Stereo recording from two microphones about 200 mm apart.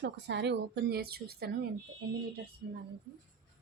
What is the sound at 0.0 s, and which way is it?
A woman's voice, 60° right (ahead or behind).